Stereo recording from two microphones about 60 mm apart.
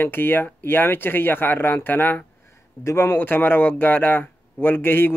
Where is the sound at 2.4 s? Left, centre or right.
Left.